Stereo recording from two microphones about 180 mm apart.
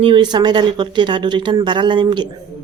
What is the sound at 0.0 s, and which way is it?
A woman's voice, 25° right (ahead or behind).